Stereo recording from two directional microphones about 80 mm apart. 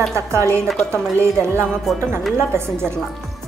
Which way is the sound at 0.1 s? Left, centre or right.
Right.